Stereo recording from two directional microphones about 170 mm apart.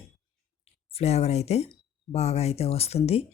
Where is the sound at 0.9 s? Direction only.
40° left (ahead or behind).